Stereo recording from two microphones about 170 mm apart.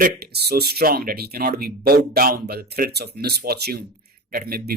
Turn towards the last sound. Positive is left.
turn(degrees=-60)  # may be behind; listen again after turning